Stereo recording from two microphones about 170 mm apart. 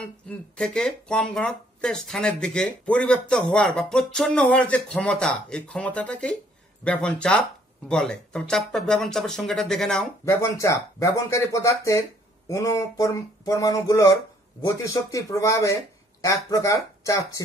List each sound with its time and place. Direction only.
0.6 s speech: 5° left (ahead or behind)
10.2 s speech: 15° left (ahead or behind)